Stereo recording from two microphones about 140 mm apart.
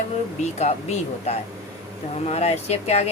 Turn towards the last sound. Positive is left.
turn(degrees=50)  # may be behind; listen again after turning